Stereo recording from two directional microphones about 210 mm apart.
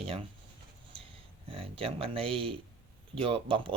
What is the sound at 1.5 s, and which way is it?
Speech, 25° right (ahead or behind).